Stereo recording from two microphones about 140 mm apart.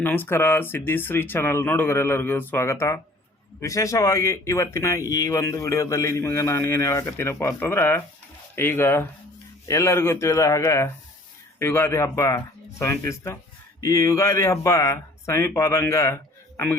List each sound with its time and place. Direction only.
0.0 s speech: 15° left (ahead or behind)